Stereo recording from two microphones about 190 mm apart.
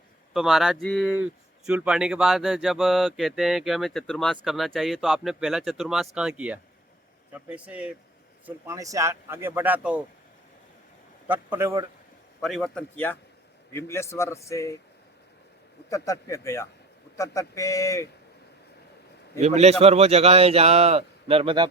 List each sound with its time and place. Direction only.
0.3 s speech: centre (ahead or behind)
11.3 s speech: 10° right (ahead or behind)
12.4 s a man's voice: centre (ahead or behind); by 14.8 s 15° left (ahead or behind)
15.9 s a man's voice: 15° left (ahead or behind)
19.4 s a man's voice: 35° right (ahead or behind)